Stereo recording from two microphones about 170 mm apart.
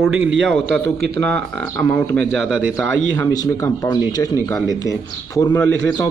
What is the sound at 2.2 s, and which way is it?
Speech, 90° right.